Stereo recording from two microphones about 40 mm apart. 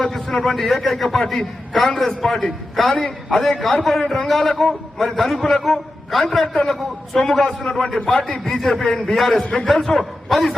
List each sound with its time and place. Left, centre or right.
0.4 s a man's voice: centre
9.4 s a man's voice: left
9.6 s a man's voice: centre